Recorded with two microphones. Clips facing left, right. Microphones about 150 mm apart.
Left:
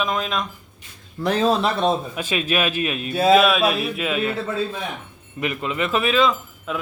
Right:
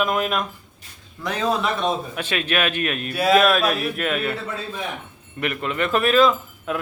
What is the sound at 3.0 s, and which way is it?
Speech, 25° left (ahead or behind).